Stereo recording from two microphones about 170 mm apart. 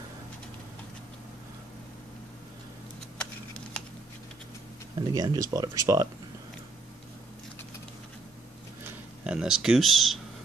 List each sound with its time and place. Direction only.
4.9 s speech: 25° right (ahead or behind)
9.2 s speech: 5° right (ahead or behind)